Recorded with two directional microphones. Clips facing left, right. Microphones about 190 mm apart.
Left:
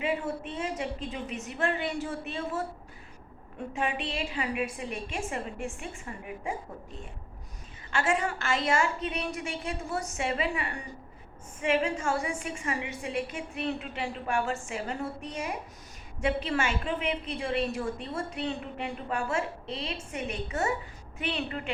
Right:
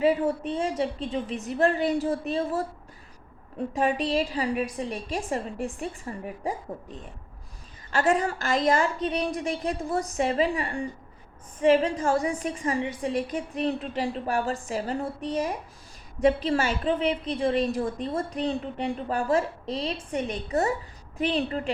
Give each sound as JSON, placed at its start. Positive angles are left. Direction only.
{"t": 0.0, "sound": "a woman's voice", "side_deg": -35}
{"t": 3.8, "sound": "a woman's voice", "side_deg": -40}
{"t": 7.9, "sound": "a woman's voice", "side_deg": -40}